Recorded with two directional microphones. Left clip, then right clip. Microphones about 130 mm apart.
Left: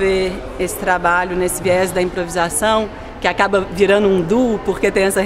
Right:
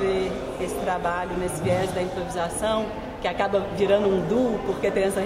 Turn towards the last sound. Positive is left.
turn(degrees=20)  # may be behind; listen again after turning